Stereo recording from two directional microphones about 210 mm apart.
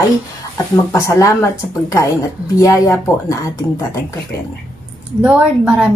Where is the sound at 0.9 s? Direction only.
15° left (ahead or behind).